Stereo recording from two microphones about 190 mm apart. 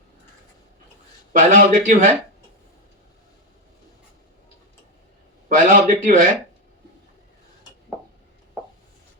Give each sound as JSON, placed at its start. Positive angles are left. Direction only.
{"t": 1.3, "sound": "speech", "side_deg": -45}
{"t": 5.5, "sound": "speech", "side_deg": -45}